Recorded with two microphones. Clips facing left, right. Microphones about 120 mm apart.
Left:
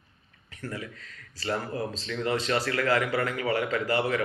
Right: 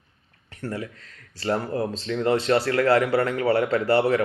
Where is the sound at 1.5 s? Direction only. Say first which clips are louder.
Right 6 dB; 35° right (ahead or behind).